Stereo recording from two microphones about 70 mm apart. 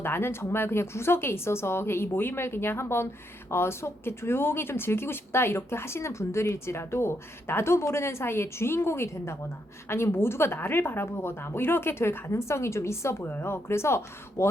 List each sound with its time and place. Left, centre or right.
0.0 s speech: left